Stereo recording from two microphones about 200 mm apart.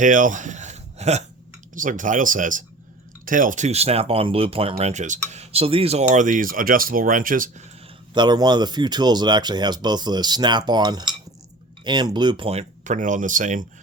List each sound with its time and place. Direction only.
0.0 s a sound: 40° right (ahead or behind)
1.7 s speech: 40° right (ahead or behind)
8.1 s speech: 20° right (ahead or behind); by 13.7 s 40° right (ahead or behind)